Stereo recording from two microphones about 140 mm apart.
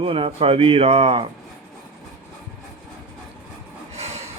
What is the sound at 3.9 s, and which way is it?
Train, 50° right (ahead or behind).